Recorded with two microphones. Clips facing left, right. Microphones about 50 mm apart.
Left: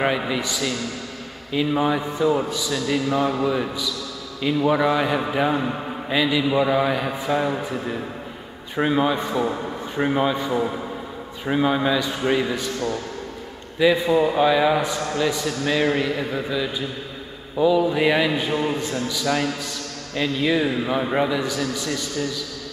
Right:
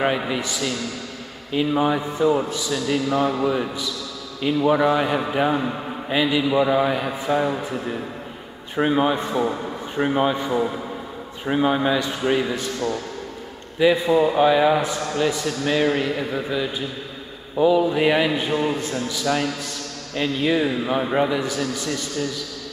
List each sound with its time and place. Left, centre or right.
0.0 s a man's voice: centre
8.7 s a man's voice: centre
17.6 s a man's voice: centre